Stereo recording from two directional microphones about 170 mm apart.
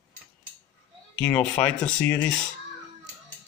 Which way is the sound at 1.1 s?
5° left (ahead or behind).